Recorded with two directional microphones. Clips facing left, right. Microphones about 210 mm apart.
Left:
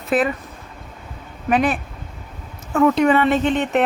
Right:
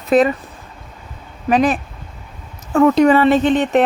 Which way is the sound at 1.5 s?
40° right (ahead or behind).